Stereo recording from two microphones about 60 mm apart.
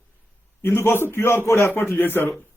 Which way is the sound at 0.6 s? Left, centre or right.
Left.